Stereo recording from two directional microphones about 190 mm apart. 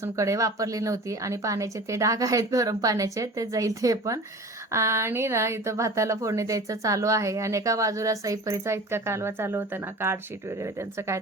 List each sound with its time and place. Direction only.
0.0 s speech: 15° right (ahead or behind)